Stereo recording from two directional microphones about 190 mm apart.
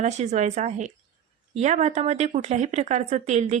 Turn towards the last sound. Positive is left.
turn(degrees=-35)  # may be behind; listen again after turning